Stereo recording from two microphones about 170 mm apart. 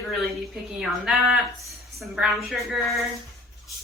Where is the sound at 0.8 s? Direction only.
5° right (ahead or behind).